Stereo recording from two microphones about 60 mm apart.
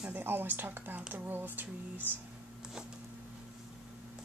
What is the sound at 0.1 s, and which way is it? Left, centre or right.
Speech, right.